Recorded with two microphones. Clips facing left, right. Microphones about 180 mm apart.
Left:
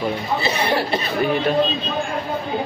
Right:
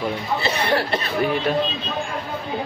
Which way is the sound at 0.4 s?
10° left (ahead or behind).